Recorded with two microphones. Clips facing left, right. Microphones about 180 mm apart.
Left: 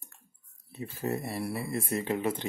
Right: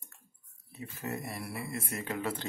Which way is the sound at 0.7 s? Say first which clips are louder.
Left 6 dB; 30° left (ahead or behind).